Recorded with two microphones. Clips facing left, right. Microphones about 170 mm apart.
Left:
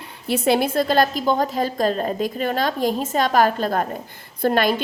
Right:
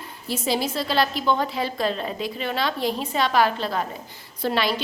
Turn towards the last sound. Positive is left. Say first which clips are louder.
# left 5 dB
turn(degrees=50)  # may be behind; listen again after turning